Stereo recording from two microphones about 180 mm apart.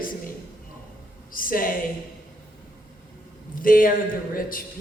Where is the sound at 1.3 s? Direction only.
50° left (ahead or behind).